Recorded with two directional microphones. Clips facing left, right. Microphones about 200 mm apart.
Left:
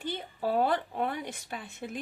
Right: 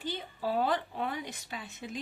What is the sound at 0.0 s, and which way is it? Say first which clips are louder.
Speech: left 2 dB; 55° left (ahead or behind).